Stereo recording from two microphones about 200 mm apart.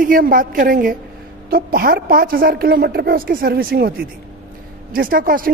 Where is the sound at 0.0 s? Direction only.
45° right (ahead or behind).